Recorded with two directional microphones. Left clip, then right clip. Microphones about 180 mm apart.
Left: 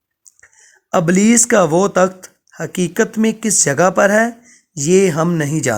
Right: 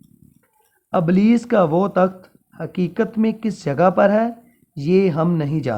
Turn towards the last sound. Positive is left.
turn(degrees=40)  # may be behind; listen again after turning